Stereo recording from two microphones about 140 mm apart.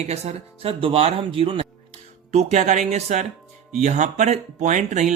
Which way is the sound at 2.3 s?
55° right (ahead or behind).